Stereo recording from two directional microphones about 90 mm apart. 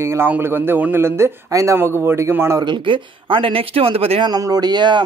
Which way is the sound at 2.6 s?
70° right (ahead or behind).